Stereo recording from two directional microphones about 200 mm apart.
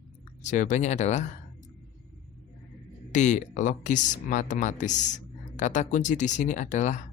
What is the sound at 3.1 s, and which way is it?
Speech, 35° left (ahead or behind).